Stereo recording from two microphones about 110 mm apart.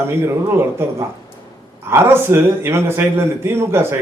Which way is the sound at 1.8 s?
20° right (ahead or behind).